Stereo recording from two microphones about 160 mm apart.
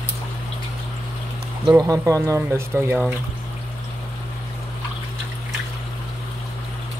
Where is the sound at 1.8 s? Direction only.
20° right (ahead or behind).